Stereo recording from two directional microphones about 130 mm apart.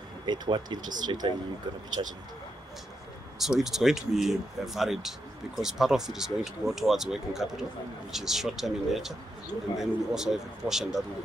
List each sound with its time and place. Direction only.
0.3 s speech: 35° right (ahead or behind)
3.3 s speech: centre (ahead or behind)